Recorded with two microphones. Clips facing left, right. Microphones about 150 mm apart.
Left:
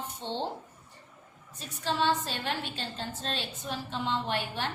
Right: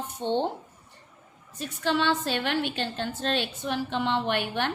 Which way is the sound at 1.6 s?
70° right (ahead or behind).